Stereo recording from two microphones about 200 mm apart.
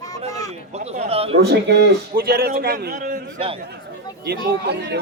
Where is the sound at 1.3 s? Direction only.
55° right (ahead or behind); by 3.2 s 40° right (ahead or behind).